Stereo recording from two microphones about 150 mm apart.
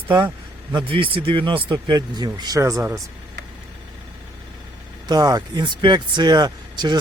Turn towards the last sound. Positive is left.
turn(degrees=-30)  # may be behind; listen again after turning